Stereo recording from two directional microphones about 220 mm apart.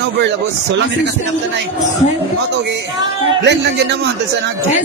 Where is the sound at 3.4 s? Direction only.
50° right (ahead or behind).